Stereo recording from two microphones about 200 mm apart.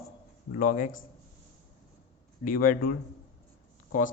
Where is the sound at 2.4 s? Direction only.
45° left (ahead or behind).